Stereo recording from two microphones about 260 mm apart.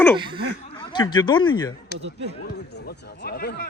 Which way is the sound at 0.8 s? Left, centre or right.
Centre.